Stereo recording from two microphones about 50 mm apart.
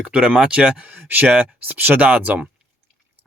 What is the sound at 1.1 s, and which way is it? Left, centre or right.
Speech, right.